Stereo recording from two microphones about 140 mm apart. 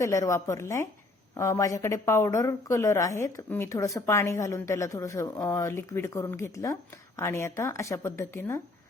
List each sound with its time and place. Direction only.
0.0 s a woman's voice: 20° left (ahead or behind)